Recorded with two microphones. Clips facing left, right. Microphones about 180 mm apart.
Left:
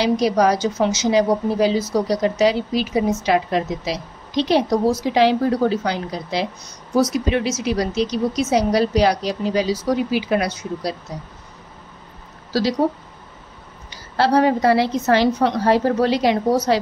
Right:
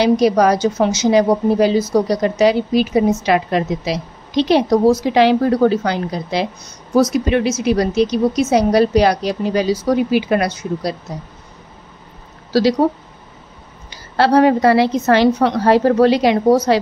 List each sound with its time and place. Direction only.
0.0 s a woman's voice: 55° right (ahead or behind)
7.2 s a woman's voice: 55° right (ahead or behind)
13.8 s a woman's voice: 70° right (ahead or behind)